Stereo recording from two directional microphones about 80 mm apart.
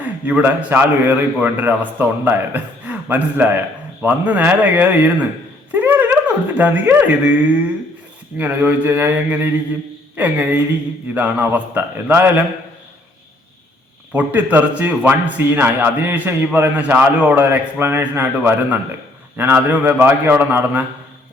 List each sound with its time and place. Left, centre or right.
0.0 s a man's voice: right
8.4 s a man's voice: right
14.1 s a man's voice: right